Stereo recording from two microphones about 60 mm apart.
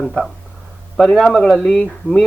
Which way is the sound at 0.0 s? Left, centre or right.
Centre.